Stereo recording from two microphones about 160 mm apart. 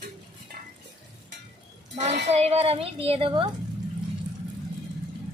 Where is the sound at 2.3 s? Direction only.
40° right (ahead or behind).